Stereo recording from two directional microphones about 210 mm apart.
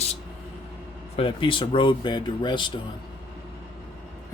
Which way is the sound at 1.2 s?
25° left (ahead or behind).